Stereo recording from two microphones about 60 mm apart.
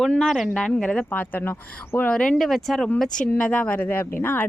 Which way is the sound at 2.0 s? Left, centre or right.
Centre.